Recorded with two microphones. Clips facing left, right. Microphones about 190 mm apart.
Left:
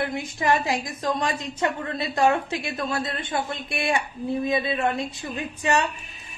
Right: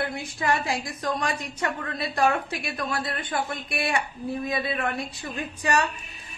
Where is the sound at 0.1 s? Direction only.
20° left (ahead or behind).